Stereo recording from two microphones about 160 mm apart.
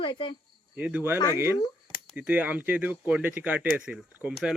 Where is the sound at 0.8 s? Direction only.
10° right (ahead or behind).